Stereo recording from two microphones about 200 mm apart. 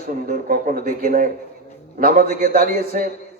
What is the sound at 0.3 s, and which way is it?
A man's voice, 45° right (ahead or behind).